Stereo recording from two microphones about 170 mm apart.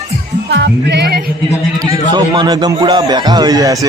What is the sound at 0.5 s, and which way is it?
Music, 85° right.